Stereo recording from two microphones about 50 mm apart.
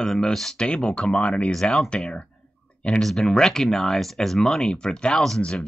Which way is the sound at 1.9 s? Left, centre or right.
Left.